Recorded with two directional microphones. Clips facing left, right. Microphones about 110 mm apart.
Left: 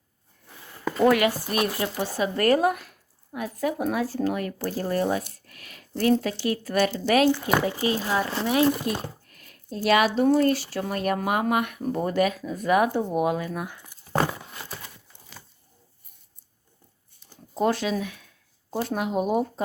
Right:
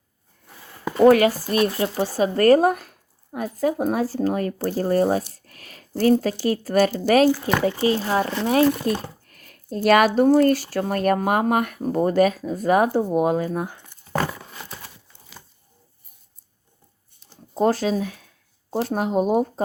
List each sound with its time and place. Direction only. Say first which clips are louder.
1.0 s speech: right 6 dB; 35° right (ahead or behind)
9.3 s a sound: right 5 dB; 45° right (ahead or behind)
10.3 s speech: right 4 dB; 45° right (ahead or behind); by 13.8 s 30° right (ahead or behind)
14.1 s a sound: even; 25° left (ahead or behind)
14.5 s horse: right 1 dB; 5° left (ahead or behind)
17.5 s speech: right 4 dB; 35° right (ahead or behind)